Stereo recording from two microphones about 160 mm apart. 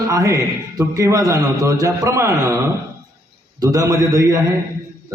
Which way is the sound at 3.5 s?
20° right (ahead or behind).